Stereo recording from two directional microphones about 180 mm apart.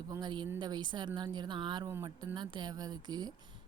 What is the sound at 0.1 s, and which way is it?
A woman's voice, 25° right (ahead or behind).